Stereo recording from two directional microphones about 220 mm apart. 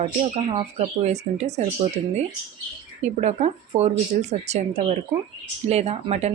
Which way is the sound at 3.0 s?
30° right (ahead or behind).